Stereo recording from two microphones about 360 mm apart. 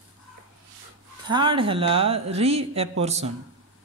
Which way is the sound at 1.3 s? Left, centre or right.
Centre.